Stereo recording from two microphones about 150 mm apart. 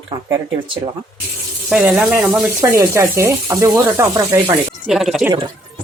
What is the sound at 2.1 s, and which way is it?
Speech, 10° right (ahead or behind).